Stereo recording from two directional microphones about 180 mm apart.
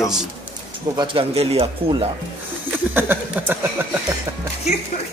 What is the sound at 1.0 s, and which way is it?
Speech, 30° right (ahead or behind).